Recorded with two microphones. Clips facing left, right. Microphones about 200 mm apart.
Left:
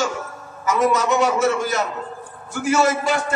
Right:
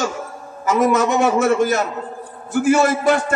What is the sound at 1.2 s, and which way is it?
A man's voice, 50° right (ahead or behind).